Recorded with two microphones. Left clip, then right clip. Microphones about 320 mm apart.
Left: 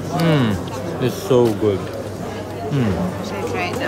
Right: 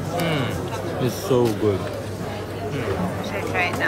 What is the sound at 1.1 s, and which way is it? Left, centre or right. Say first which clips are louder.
Speech: left 5 dB; centre.